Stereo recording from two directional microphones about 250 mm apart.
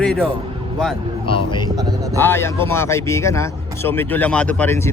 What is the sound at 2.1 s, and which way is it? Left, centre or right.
Speech, centre.